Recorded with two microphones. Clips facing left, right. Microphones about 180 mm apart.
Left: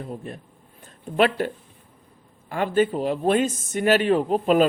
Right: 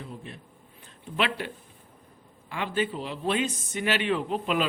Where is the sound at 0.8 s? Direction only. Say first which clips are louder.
Left 9 dB; 45° left (ahead or behind).